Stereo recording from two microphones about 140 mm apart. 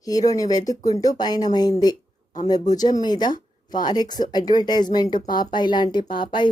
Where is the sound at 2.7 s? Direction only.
30° left (ahead or behind).